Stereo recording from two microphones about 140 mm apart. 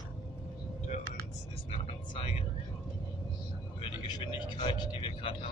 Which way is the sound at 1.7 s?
40° left (ahead or behind).